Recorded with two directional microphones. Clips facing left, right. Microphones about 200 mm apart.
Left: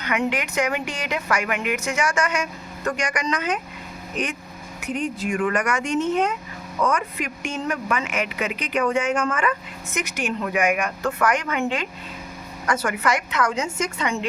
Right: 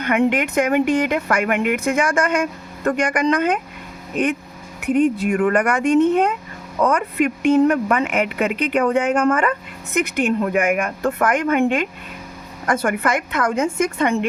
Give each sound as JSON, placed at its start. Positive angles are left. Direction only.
{"t": 0.0, "sound": "speech", "side_deg": -55}
{"t": 4.8, "sound": "a woman's voice", "side_deg": -60}